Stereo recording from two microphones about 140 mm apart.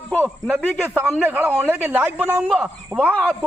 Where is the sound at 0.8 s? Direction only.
15° right (ahead or behind).